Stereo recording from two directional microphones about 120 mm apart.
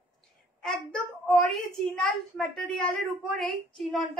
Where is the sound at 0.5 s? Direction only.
5° left (ahead or behind).